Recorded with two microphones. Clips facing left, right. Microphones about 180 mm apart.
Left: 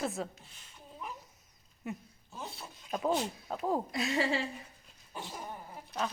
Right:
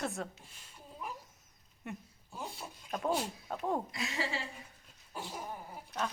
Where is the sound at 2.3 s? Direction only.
15° right (ahead or behind).